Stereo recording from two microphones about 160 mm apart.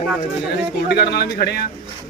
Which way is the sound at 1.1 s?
90° left.